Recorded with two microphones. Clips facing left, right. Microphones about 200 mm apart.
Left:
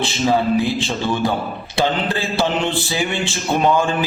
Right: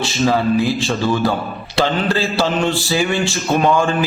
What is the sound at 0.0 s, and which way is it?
A man's voice, 20° left (ahead or behind).